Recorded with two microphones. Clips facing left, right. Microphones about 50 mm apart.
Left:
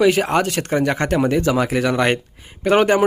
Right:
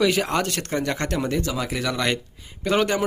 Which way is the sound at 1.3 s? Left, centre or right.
Left.